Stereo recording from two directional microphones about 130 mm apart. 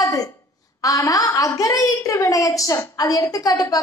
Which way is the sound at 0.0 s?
25° left (ahead or behind).